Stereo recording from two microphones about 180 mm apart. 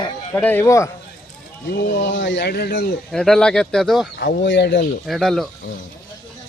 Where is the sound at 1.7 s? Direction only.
90° left; by 2.9 s 65° left (ahead or behind).